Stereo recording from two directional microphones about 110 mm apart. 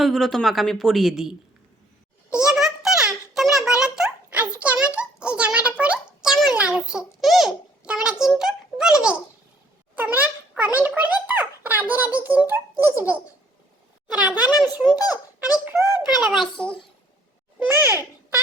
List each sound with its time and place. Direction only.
0.0 s speech: centre (ahead or behind)
2.3 s a sound: 5° right (ahead or behind)
9.9 s a child's voice: 15° right (ahead or behind)
14.2 s a child's voice: 15° right (ahead or behind)
14.5 s a child's voice: 35° left (ahead or behind)
15.6 s a child's voice: 15° right (ahead or behind)